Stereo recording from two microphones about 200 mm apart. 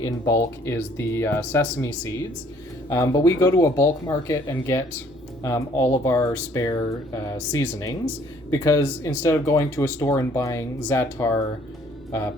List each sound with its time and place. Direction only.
0.0 s speech: 15° left (ahead or behind)